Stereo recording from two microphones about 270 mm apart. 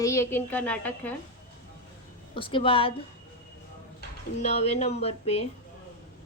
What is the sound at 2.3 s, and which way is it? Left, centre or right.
Speech, centre.